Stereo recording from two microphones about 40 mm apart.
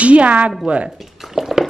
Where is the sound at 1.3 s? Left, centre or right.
Centre.